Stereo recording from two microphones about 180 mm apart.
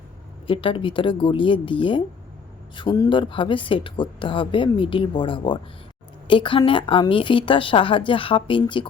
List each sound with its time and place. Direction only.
0.4 s speech: 30° left (ahead or behind)